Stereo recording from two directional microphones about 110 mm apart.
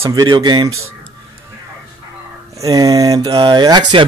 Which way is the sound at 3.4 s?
45° right (ahead or behind).